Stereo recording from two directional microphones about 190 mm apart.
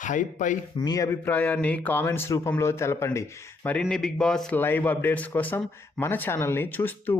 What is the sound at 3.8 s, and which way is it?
Speech, 5° left (ahead or behind).